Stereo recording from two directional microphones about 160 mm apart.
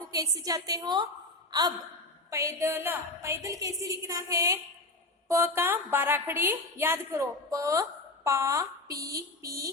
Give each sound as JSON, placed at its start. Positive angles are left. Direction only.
{"t": 0.1, "sound": "a woman's voice", "side_deg": -20}